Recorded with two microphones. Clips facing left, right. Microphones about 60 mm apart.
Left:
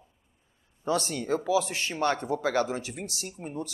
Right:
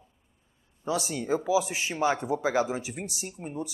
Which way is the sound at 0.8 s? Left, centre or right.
Centre.